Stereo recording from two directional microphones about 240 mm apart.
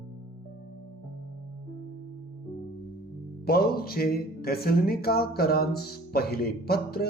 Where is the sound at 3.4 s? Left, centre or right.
Left.